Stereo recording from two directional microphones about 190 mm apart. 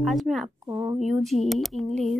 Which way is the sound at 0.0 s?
Centre (ahead or behind).